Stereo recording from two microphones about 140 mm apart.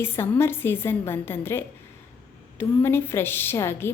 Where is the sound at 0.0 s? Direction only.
15° left (ahead or behind).